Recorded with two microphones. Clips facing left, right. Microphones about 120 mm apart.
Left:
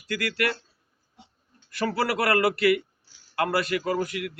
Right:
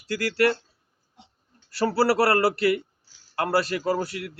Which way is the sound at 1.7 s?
35° right (ahead or behind).